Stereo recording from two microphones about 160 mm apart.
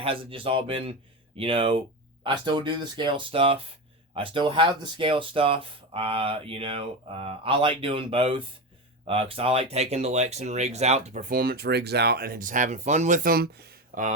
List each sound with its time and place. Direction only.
0.0 s speech: 35° right (ahead or behind)
11.3 s speech: 65° right (ahead or behind)